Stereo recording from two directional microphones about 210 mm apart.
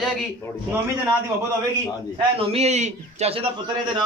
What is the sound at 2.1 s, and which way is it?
A man's voice, 30° right (ahead or behind).